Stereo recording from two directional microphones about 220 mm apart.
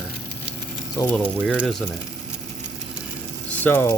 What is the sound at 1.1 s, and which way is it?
Speech, 5° left (ahead or behind).